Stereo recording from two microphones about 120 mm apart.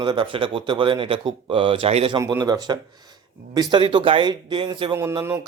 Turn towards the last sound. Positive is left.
turn(degrees=-25)  # may be behind; listen again after turning